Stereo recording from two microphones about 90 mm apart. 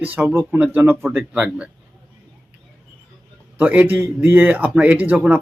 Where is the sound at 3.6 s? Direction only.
20° right (ahead or behind).